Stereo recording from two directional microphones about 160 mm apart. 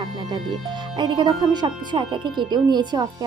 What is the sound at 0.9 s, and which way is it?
Speech, 25° right (ahead or behind).